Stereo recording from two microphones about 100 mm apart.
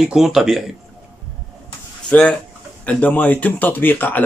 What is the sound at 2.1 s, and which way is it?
Speech, 15° left (ahead or behind).